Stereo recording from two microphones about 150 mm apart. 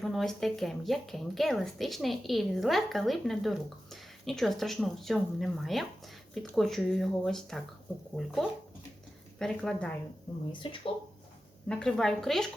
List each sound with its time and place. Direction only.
0.0 s speech: centre (ahead or behind)
10.5 s speech: 35° left (ahead or behind)
11.7 s speech: 5° left (ahead or behind)